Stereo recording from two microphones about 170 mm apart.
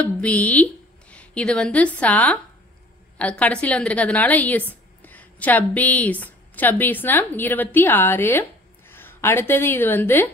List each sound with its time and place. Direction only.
0.0 s a woman's voice: 10° left (ahead or behind)